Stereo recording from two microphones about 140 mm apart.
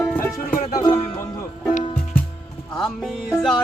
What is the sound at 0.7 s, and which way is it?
Music, 25° left (ahead or behind).